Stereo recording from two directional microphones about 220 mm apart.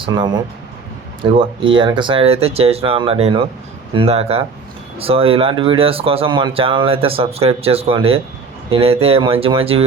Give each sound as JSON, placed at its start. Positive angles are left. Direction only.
{"t": 0.0, "sound": "speech", "side_deg": -20}